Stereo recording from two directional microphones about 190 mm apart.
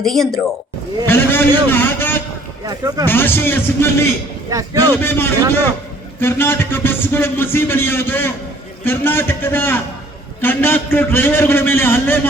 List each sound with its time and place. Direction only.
0.0 s a man's voice: centre (ahead or behind)
2.6 s speech: 20° right (ahead or behind)
3.1 s a man's voice: 10° left (ahead or behind)
4.4 s speech: 15° right (ahead or behind)
5.0 s a man's voice: 10° left (ahead or behind)